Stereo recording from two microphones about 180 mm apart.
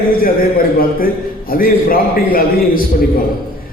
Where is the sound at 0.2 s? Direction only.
55° left (ahead or behind).